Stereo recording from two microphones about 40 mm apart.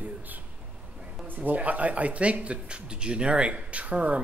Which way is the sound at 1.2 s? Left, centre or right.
Right.